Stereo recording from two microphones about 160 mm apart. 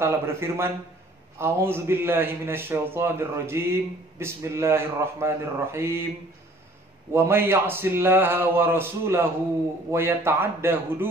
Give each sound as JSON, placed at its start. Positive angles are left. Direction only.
{"t": 0.0, "sound": "a man's voice", "side_deg": -15}
{"t": 7.2, "sound": "a man's voice", "side_deg": -15}